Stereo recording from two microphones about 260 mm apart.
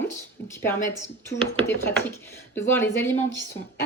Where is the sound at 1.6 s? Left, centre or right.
Centre.